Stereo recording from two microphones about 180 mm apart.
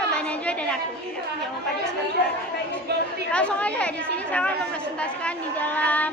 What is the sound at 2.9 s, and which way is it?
Speech, 65° right (ahead or behind).